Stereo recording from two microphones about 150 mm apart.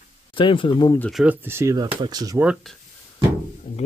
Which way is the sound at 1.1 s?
5° right (ahead or behind).